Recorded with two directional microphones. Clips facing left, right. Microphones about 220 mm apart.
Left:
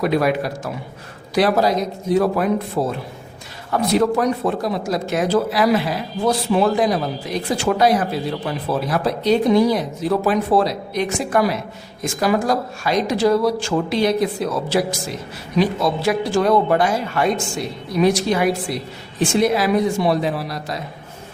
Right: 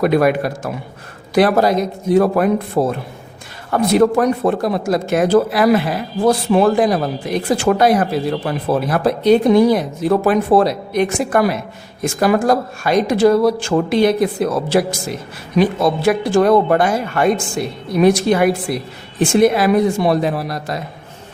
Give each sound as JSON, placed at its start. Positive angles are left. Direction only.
{"t": 0.0, "sound": "a man's voice", "side_deg": -55}